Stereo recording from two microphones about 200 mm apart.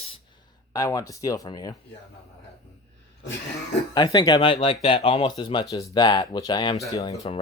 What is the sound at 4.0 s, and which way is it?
Speech, 20° left (ahead or behind).